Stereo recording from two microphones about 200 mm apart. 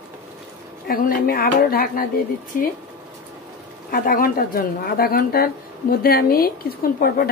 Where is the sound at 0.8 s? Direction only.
45° left (ahead or behind).